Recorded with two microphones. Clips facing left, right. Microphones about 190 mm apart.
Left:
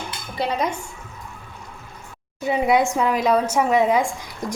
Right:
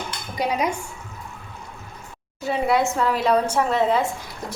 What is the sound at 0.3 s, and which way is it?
Dishes, 10° right (ahead or behind).